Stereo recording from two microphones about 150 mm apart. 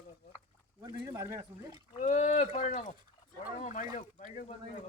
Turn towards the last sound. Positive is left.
turn(degrees=55)  # may be behind; listen again after turning